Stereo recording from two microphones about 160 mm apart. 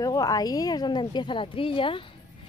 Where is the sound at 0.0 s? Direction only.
20° left (ahead or behind).